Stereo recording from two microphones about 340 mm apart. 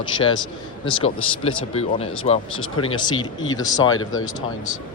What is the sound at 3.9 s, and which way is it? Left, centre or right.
Speech, left.